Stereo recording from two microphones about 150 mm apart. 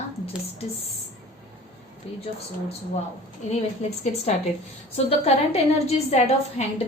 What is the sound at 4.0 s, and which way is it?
Speech, 45° left (ahead or behind).